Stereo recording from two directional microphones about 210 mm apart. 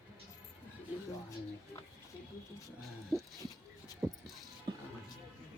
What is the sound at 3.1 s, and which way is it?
Dog, centre (ahead or behind).